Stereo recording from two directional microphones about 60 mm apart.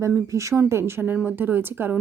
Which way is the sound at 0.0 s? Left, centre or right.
Right.